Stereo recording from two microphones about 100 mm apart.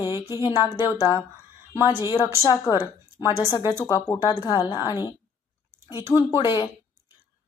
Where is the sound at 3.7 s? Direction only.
35° left (ahead or behind).